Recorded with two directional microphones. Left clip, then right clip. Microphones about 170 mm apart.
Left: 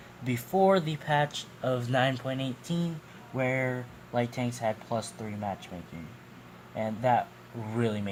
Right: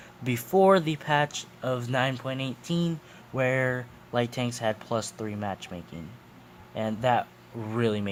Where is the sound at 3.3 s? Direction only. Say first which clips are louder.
Right 4 dB; 55° right (ahead or behind).